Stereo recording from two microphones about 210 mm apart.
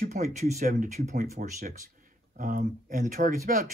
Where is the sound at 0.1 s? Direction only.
35° right (ahead or behind).